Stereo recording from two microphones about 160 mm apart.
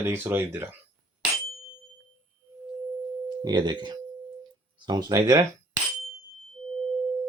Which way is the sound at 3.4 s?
25° right (ahead or behind).